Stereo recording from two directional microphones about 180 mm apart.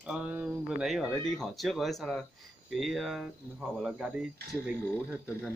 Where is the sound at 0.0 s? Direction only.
5° right (ahead or behind).